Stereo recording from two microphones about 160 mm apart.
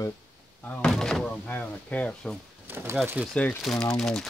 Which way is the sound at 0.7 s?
5° left (ahead or behind).